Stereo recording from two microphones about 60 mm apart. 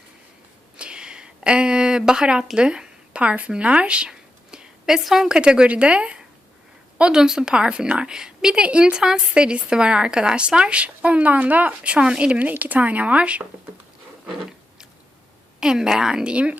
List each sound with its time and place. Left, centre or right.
0.8 s a sound: centre
2.6 s speech: centre
5.4 s a woman's voice: centre
15.6 s a woman's voice: centre